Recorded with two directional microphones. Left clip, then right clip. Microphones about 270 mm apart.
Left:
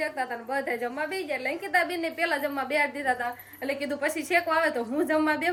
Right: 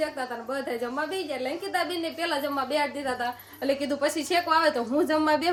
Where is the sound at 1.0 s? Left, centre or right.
Centre.